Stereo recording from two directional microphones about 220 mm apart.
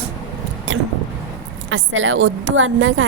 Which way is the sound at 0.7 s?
60° right (ahead or behind).